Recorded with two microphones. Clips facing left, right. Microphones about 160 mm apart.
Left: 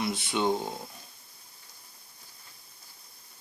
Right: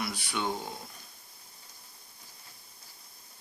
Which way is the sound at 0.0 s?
20° left (ahead or behind).